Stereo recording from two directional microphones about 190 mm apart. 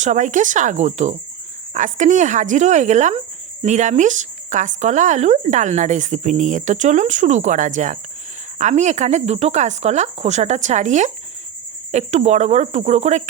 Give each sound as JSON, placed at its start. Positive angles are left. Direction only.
{"t": 0.0, "sound": "speech", "side_deg": -40}